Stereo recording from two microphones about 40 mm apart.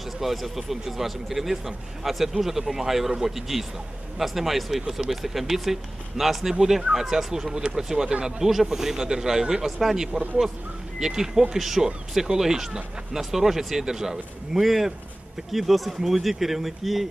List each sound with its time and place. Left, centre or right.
0.0 s speech: centre; by 8.5 s right
8.5 s speech: centre